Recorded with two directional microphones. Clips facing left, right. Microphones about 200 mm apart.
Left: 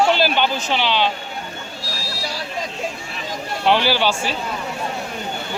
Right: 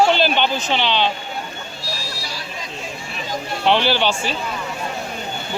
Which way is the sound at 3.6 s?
10° left (ahead or behind).